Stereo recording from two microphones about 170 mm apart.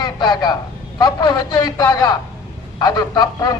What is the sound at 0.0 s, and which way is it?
A man's voice, 25° left (ahead or behind).